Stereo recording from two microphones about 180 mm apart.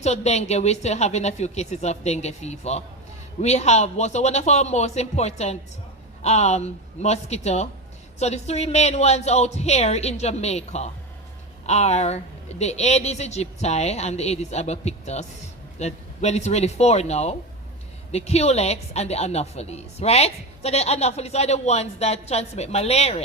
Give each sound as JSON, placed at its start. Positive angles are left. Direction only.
{"t": 0.0, "sound": "a woman's voice", "side_deg": 35}